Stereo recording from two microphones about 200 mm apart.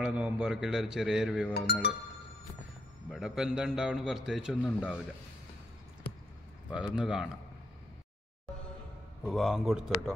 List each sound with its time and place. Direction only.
0.0 s a man's voice: 5° right (ahead or behind)
1.5 s speech: 55° left (ahead or behind)
3.1 s a man's voice: centre (ahead or behind)
6.7 s a man's voice: 5° right (ahead or behind)
9.2 s a man's voice: centre (ahead or behind)